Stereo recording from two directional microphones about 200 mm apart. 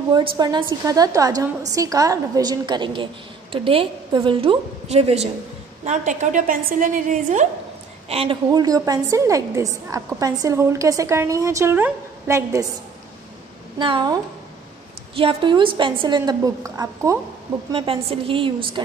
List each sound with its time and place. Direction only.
0.4 s a woman's voice: 20° right (ahead or behind); by 7.4 s 40° right (ahead or behind)
8.1 s a woman's voice: 25° right (ahead or behind)
13.7 s a woman's voice: 25° right (ahead or behind)
15.1 s a woman's voice: 25° right (ahead or behind)
17.6 s a woman's voice: 25° right (ahead or behind)